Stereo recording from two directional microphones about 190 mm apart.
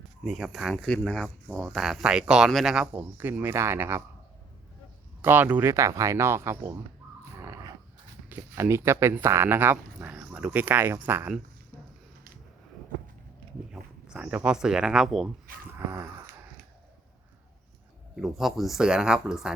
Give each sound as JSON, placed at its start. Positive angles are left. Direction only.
{"t": 0.3, "sound": "speech", "side_deg": 0}
{"t": 5.2, "sound": "speech", "side_deg": -10}
{"t": 7.3, "sound": "a sound", "side_deg": -15}
{"t": 8.3, "sound": "speech", "side_deg": -15}
{"t": 13.7, "sound": "speech", "side_deg": -5}
{"t": 15.7, "sound": "dog", "side_deg": -15}
{"t": 18.2, "sound": "speech", "side_deg": 0}